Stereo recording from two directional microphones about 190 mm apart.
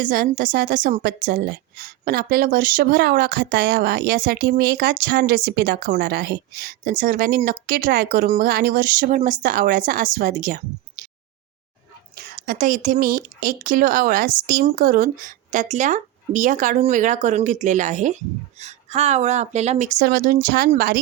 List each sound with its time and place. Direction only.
0.0 s a woman's voice: 50° right (ahead or behind)
12.1 s a woman's voice: 45° right (ahead or behind)
20.0 s a woman's voice: 50° right (ahead or behind)